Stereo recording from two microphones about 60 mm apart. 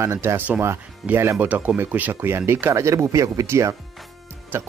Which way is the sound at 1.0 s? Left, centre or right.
Centre.